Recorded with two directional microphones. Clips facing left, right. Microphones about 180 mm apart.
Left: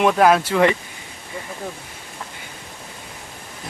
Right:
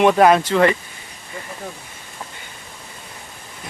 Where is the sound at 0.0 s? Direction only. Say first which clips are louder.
Right 2 dB; centre (ahead or behind).